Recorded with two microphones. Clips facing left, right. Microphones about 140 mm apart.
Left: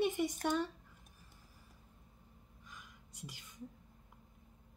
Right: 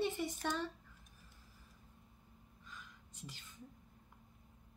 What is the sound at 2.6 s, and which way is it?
Whispering, 10° left (ahead or behind).